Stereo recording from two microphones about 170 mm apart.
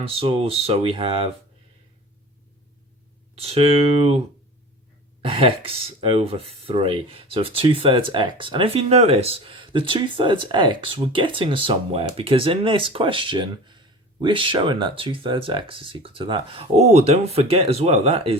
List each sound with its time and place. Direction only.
0.0 s speech: 35° right (ahead or behind)
3.4 s speech: 35° right (ahead or behind)
5.3 s speech: 35° right (ahead or behind)